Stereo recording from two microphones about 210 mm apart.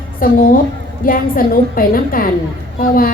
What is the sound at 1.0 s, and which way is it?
A woman's voice, 40° left (ahead or behind).